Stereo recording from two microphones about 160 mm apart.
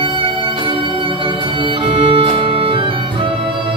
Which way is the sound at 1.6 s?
35° right (ahead or behind).